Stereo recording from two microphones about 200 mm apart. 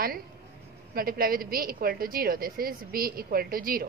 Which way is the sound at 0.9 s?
45° right (ahead or behind).